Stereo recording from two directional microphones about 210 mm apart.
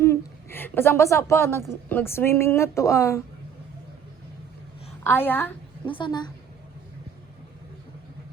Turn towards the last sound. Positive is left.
turn(degrees=20)  # may be behind; listen again after turning